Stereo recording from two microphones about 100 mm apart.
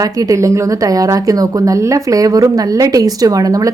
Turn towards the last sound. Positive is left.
turn(degrees=-35)  # may be behind; listen again after turning